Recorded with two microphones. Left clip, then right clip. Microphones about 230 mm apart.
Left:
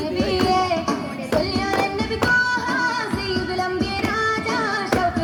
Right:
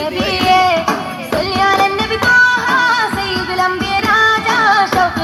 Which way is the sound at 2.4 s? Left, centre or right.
Right.